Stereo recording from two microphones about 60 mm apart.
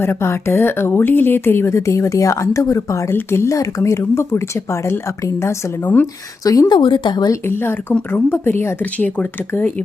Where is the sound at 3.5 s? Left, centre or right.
Left.